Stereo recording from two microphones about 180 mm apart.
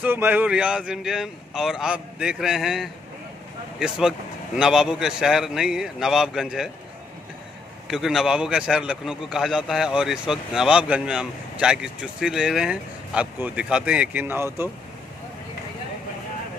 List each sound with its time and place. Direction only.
0.0 s a man's voice: 10° right (ahead or behind)
4.6 s a man's voice: 5° right (ahead or behind)
7.9 s a man's voice: centre (ahead or behind)